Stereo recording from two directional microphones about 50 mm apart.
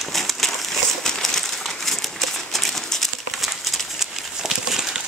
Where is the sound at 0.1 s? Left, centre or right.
Centre.